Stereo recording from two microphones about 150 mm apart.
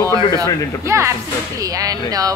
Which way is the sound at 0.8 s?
20° right (ahead or behind).